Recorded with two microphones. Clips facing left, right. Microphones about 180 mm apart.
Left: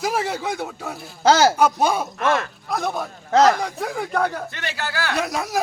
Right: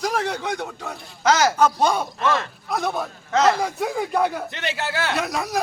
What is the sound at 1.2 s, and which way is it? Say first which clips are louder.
Speech: left 3 dB; 30° left (ahead or behind).